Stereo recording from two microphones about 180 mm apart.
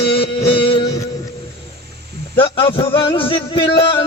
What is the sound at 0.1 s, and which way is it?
Music, 30° left (ahead or behind).